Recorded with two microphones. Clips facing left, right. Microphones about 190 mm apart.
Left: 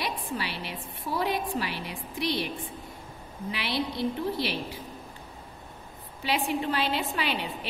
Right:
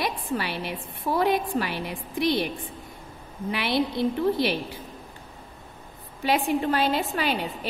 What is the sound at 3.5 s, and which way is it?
Speech, 55° right (ahead or behind).